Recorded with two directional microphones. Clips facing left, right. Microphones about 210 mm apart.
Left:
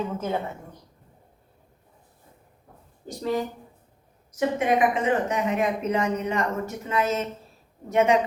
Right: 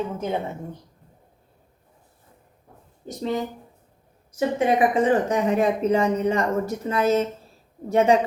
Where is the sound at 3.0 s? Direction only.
20° right (ahead or behind).